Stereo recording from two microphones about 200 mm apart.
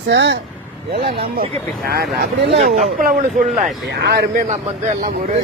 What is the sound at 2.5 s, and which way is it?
Speech, 35° right (ahead or behind).